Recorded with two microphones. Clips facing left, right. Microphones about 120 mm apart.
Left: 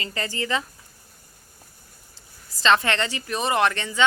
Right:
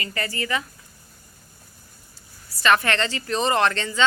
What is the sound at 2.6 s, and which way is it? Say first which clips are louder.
Speech: even; 20° left (ahead or behind).